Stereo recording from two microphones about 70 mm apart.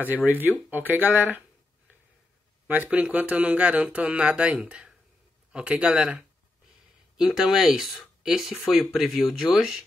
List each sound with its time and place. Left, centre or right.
0.1 s speech: right
2.7 s speech: right
7.2 s speech: centre